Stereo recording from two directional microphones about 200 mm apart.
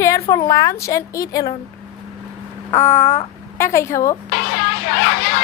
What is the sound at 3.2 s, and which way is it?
Speech, 15° left (ahead or behind).